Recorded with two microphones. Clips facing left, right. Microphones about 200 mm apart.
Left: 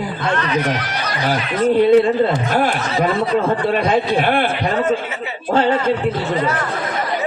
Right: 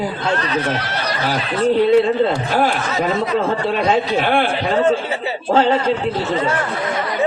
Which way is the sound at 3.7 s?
50° left (ahead or behind).